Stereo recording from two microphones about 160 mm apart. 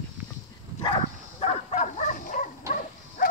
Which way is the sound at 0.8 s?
40° left (ahead or behind).